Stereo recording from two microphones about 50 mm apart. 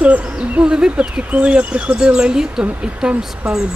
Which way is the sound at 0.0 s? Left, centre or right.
Right.